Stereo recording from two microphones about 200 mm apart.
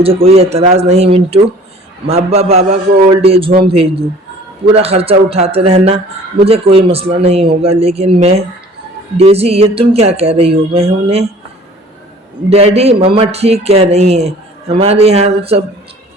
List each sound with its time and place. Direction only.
0.0 s a man's voice: 30° right (ahead or behind)
12.5 s speech: 30° right (ahead or behind)